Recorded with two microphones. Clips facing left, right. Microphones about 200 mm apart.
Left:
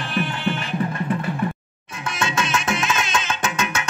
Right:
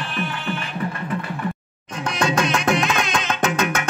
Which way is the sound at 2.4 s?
50° right (ahead or behind).